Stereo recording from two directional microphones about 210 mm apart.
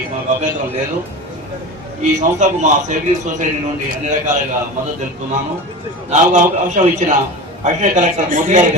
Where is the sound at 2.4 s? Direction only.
35° right (ahead or behind).